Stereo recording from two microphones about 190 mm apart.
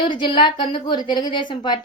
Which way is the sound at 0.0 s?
25° left (ahead or behind).